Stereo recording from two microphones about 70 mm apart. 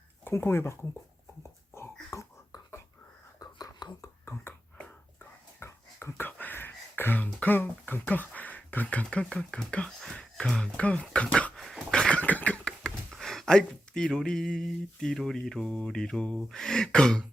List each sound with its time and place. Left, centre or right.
0.3 s speech: left
2.1 s beatboxing: left
3.4 s whispering: left
4.8 s whispering: centre
5.5 s dog: left
6.4 s a sound: left
7.4 s speech: left
11.6 s dog: centre
11.9 s a sound: centre
12.2 s a sound: left
13.1 s speech: centre